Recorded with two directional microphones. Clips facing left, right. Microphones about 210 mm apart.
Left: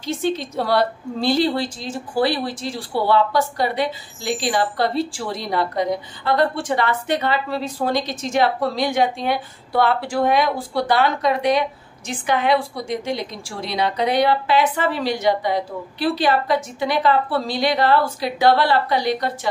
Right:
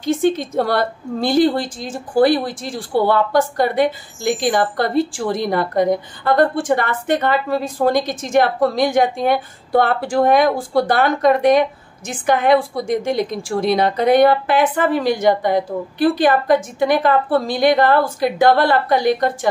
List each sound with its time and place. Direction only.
0.0 s a woman's voice: 50° right (ahead or behind)